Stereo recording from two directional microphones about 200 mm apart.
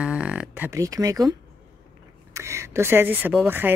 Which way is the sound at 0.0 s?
5° right (ahead or behind).